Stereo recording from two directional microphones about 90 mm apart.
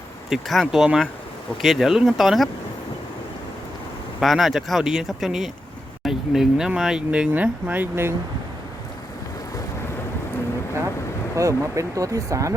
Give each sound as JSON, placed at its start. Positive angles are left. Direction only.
{"t": 0.3, "sound": "speech", "side_deg": 0}
{"t": 4.2, "sound": "speech", "side_deg": 0}
{"t": 11.3, "sound": "speech", "side_deg": -35}